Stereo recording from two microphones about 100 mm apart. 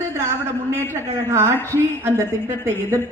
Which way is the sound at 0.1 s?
25° right (ahead or behind).